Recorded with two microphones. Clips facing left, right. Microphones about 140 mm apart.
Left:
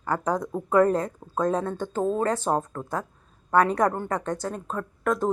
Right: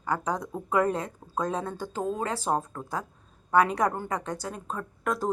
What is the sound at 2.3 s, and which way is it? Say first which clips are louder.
Speech: left 3 dB; 5° right (ahead or behind).